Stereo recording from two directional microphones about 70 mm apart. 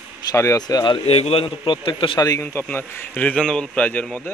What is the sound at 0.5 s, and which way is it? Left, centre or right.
Speech, left.